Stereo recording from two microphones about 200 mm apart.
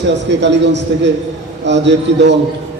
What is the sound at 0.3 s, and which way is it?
A man's voice, 60° right (ahead or behind).